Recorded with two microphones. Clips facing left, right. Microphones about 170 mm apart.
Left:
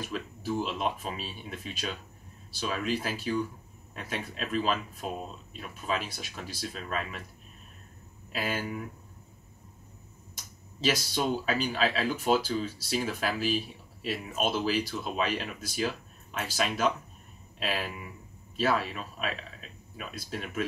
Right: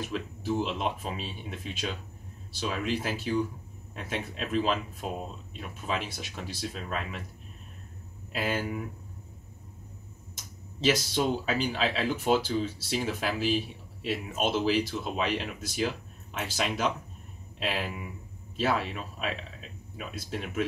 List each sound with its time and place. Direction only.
0.0 s speech: 20° right (ahead or behind)
8.3 s speech: 20° right (ahead or behind)
10.8 s speech: 20° right (ahead or behind)